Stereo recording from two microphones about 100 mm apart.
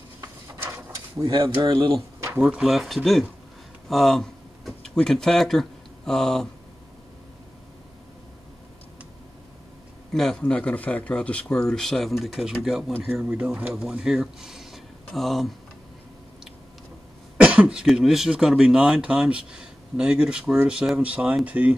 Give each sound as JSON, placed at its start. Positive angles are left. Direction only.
{"t": 0.2, "sound": "mechanisms", "side_deg": -30}
{"t": 1.2, "sound": "speech", "side_deg": -55}
{"t": 2.1, "sound": "a sound", "side_deg": -30}
{"t": 2.4, "sound": "speech", "side_deg": -5}
{"t": 10.1, "sound": "speech", "side_deg": 5}
{"t": 10.5, "sound": "speech", "side_deg": 15}
{"t": 17.4, "sound": "speech", "side_deg": -10}